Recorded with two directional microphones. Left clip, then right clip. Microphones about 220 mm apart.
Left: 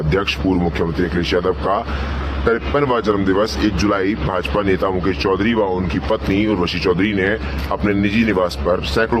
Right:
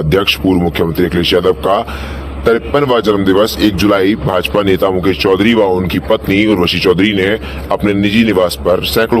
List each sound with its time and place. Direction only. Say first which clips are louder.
0.1 s speech: right 7 dB; 30° right (ahead or behind)